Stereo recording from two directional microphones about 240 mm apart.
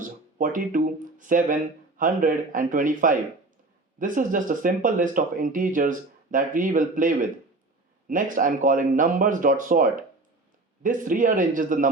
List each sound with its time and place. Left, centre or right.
0.0 s speech: right